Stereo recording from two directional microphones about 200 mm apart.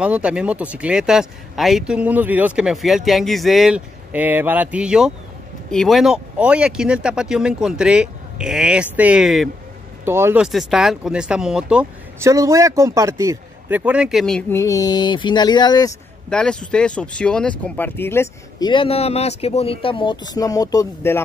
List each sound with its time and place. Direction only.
0.0 s speech: 5° right (ahead or behind)
10.0 s speech: 10° right (ahead or behind)
14.5 s speech: 15° left (ahead or behind)
16.3 s speech: 5° left (ahead or behind)
18.7 s speech: 25° left (ahead or behind)